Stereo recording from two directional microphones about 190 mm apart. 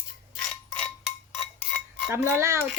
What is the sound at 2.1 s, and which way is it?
Dishes, 15° right (ahead or behind).